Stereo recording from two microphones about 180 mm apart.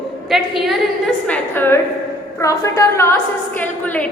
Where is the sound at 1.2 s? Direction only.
10° left (ahead or behind).